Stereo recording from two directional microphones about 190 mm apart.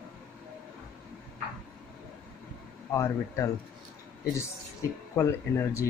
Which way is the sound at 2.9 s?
15° left (ahead or behind).